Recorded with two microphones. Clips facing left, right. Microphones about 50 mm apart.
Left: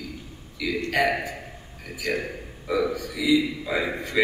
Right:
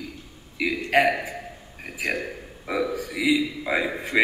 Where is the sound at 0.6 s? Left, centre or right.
Right.